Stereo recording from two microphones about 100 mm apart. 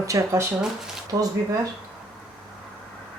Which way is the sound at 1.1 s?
45° right (ahead or behind).